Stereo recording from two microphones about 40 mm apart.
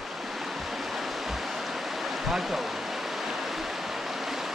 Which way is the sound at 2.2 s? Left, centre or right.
Centre.